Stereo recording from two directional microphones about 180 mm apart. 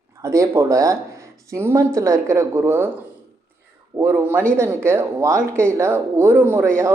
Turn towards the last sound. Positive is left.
turn(degrees=-15)  # may be behind; listen again after turning